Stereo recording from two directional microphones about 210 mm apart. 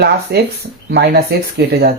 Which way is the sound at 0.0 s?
50° right (ahead or behind).